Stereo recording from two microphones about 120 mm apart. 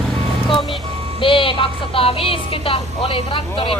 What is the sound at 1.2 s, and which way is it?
Speech, 45° left (ahead or behind).